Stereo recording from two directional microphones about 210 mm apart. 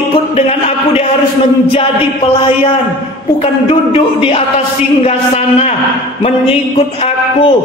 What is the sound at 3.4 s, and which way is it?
A man's voice, 25° left (ahead or behind).